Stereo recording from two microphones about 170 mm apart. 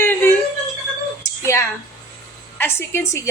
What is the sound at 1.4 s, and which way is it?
A woman's voice, 15° left (ahead or behind).